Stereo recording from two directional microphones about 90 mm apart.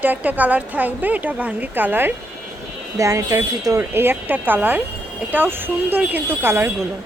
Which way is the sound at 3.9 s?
25° right (ahead or behind).